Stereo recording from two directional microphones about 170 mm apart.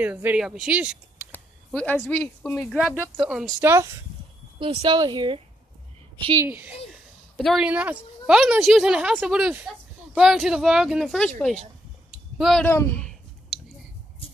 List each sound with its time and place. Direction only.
0.0 s speech: 10° right (ahead or behind)
1.3 s speech: 10° left (ahead or behind)
3.6 s speech: 15° right (ahead or behind)
4.6 s a woman's voice: 30° right (ahead or behind)
6.4 s speech: 10° right (ahead or behind)
6.9 s a woman's voice: centre (ahead or behind)
12.6 s a sound: 15° left (ahead or behind)